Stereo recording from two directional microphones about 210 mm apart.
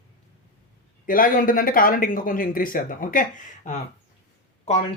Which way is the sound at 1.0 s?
40° left (ahead or behind).